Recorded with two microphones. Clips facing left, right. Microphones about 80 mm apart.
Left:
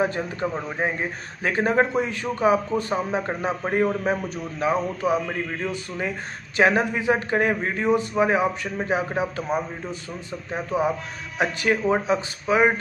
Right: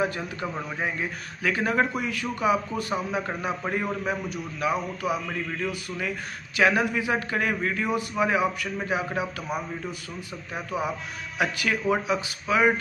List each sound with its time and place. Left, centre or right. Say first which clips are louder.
0.0 s a man's voice: left 4 dB; left